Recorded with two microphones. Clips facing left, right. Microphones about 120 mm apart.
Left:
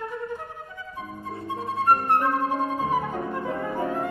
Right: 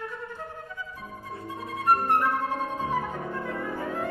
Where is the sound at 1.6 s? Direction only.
30° left (ahead or behind).